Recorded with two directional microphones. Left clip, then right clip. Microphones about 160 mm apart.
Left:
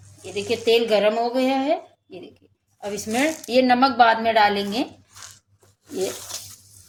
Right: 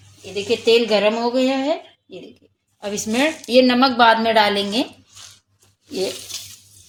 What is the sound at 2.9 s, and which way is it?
A woman's voice, 50° right (ahead or behind).